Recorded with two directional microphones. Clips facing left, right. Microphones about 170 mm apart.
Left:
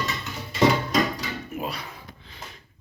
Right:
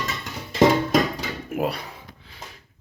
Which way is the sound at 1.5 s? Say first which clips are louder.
Right 8 dB; 65° right (ahead or behind).